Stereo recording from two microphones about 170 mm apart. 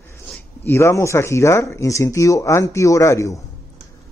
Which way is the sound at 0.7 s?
15° left (ahead or behind).